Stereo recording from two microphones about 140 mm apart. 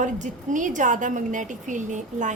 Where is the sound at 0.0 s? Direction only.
65° right (ahead or behind).